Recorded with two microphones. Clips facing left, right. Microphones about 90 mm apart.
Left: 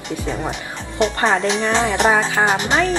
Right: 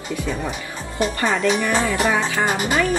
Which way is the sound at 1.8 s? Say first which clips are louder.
Left 3 dB; 75° left (ahead or behind).